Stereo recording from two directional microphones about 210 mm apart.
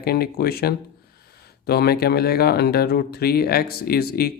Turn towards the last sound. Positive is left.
turn(degrees=45)  # may be behind; listen again after turning